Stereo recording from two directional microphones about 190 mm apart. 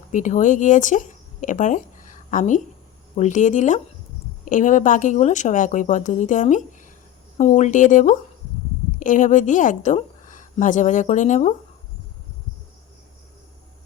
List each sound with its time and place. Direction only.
0.1 s a woman's voice: 40° left (ahead or behind)